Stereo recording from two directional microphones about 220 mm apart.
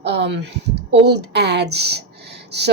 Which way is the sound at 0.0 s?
50° right (ahead or behind).